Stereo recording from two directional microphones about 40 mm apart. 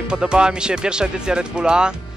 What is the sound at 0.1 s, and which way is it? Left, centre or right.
Speech, right.